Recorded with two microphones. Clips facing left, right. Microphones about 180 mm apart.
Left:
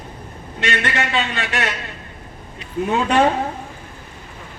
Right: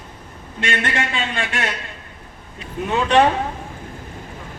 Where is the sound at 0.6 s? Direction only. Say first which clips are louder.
Left 1 dB; 50° right (ahead or behind).